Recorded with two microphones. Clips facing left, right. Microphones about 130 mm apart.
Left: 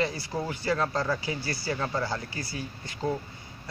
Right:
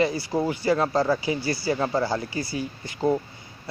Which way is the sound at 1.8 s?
25° right (ahead or behind).